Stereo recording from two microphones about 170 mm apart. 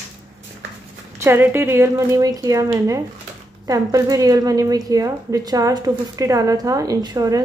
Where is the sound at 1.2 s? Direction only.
15° right (ahead or behind).